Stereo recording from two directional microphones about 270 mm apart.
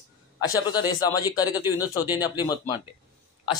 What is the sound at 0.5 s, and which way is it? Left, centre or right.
Speech, centre.